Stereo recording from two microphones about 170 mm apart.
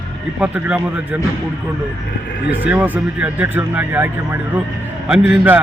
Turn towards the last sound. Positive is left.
turn(degrees=-10)  # may be behind; listen again after turning